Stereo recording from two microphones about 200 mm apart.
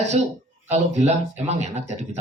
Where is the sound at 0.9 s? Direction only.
35° right (ahead or behind).